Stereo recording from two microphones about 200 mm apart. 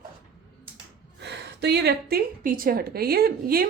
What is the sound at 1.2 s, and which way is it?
A woman's voice, 55° right (ahead or behind).